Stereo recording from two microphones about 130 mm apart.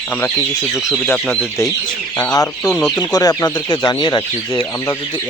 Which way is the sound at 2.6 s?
5° left (ahead or behind).